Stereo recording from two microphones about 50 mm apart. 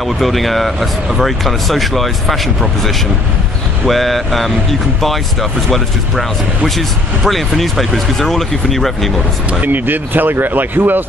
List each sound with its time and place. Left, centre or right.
0.2 s speech: centre
9.5 s speech: right